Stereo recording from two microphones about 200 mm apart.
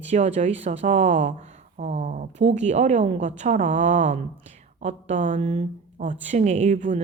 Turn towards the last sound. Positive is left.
turn(degrees=-40)  # may be behind; listen again after turning